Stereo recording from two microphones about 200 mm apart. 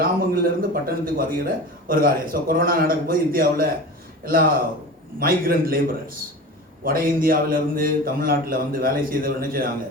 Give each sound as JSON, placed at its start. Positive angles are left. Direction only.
{"t": 0.0, "sound": "speech", "side_deg": -45}